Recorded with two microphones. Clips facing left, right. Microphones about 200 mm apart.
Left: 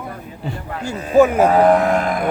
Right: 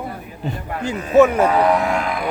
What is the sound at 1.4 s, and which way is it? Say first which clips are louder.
Cattle: left 3 dB; 50° left (ahead or behind).